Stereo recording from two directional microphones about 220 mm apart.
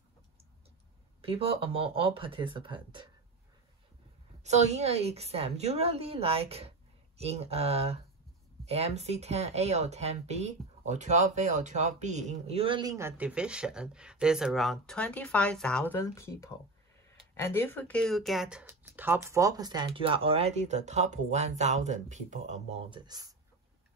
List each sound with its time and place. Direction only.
1.3 s speech: 25° right (ahead or behind)
4.4 s speech: 30° right (ahead or behind)